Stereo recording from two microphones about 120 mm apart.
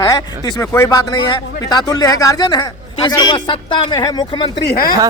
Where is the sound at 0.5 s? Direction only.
20° left (ahead or behind).